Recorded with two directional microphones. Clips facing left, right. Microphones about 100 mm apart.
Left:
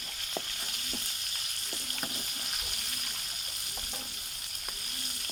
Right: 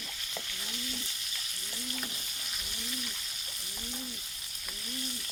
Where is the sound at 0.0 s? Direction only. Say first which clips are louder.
Left 3 dB; 40° left (ahead or behind).